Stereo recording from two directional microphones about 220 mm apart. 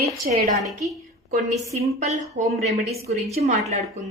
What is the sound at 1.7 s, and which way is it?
Speech, 30° right (ahead or behind).